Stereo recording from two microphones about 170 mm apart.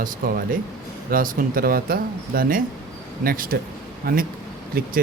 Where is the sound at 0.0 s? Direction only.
55° right (ahead or behind).